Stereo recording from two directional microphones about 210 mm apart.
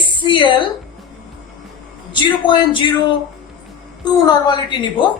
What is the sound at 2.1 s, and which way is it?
A woman's voice, 25° left (ahead or behind).